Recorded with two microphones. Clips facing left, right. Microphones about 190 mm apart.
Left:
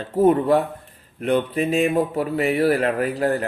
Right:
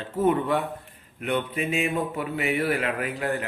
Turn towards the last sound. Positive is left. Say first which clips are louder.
# left 7 dB
turn(degrees=35)  # may be behind; listen again after turning